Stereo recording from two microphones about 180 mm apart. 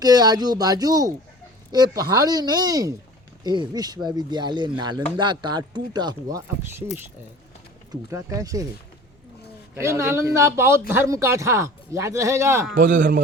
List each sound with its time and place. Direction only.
0.0 s speech: 20° right (ahead or behind)
8.1 s speech: 20° right (ahead or behind)
9.7 s speech: 15° right (ahead or behind)
12.7 s a man's voice: 50° right (ahead or behind)